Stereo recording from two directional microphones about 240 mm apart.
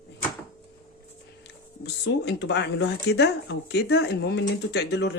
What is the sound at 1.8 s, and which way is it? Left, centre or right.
Speech, left.